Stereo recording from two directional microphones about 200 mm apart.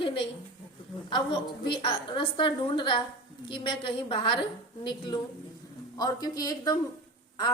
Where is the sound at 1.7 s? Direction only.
25° left (ahead or behind).